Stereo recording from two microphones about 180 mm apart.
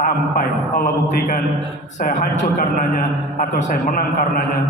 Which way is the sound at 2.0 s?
50° left (ahead or behind).